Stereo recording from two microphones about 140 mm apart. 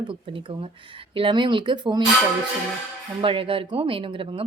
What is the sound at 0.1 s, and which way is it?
Speech, 40° right (ahead or behind).